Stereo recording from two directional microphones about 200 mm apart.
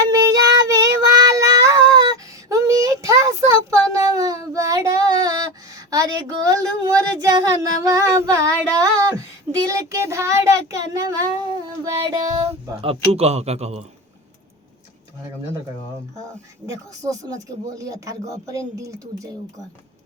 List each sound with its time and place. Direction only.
0.1 s child singing: 15° right (ahead or behind)
5.7 s a sound: 20° right (ahead or behind)
7.2 s child singing: 15° right (ahead or behind)
10.9 s a sound: 15° right (ahead or behind)
11.9 s child singing: 15° right (ahead or behind)
12.4 s speech: 30° right (ahead or behind)
16.6 s speech: 15° right (ahead or behind)